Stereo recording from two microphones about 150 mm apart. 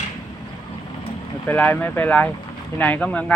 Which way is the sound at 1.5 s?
10° left (ahead or behind).